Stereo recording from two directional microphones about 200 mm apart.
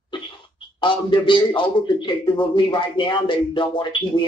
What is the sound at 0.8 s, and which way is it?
A man's voice, 25° left (ahead or behind).